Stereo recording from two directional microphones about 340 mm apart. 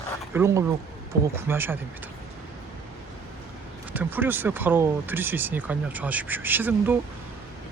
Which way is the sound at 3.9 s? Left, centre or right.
Centre.